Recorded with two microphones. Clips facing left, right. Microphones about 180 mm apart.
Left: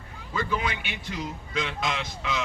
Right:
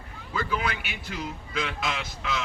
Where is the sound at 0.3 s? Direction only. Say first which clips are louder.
Even; 5° right (ahead or behind).